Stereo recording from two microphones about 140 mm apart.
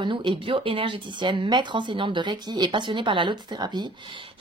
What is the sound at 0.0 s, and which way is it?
Speech, 35° right (ahead or behind).